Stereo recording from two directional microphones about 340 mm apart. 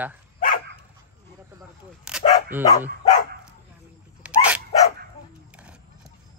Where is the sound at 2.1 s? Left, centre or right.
Centre.